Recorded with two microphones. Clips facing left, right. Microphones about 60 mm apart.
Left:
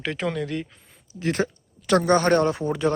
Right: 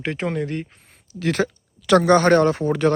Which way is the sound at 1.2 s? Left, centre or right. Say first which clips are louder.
Right 3 dB; right.